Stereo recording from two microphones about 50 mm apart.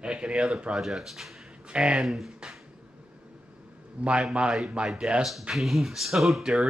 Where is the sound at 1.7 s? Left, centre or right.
Centre.